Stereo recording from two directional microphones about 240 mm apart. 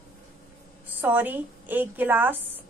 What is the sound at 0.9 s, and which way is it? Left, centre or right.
A woman's voice, centre.